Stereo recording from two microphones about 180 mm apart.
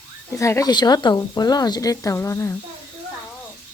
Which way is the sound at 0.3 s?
15° left (ahead or behind).